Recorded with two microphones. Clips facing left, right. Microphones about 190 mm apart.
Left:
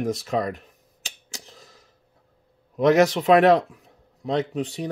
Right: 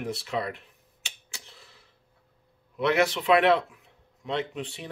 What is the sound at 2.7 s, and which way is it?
Speech, 40° left (ahead or behind).